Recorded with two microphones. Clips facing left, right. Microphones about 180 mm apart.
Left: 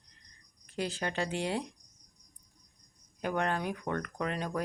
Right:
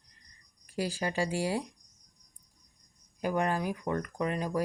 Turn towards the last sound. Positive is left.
turn(degrees=-5)  # may be behind; listen again after turning